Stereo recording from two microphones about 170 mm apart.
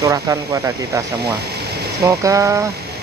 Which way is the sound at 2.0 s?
20° right (ahead or behind).